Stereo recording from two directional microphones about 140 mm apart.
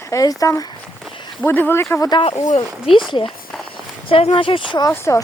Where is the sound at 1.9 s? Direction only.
25° left (ahead or behind).